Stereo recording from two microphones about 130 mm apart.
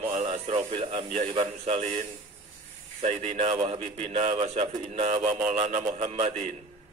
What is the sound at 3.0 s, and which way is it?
Speech, 60° right (ahead or behind).